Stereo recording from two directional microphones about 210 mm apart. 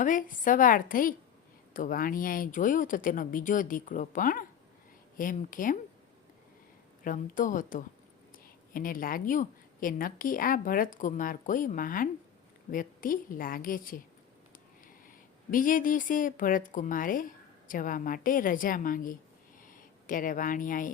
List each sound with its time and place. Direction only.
0.0 s a woman's voice: 40° left (ahead or behind)
7.0 s a woman's voice: 40° left (ahead or behind)
15.0 s speech: 40° left (ahead or behind)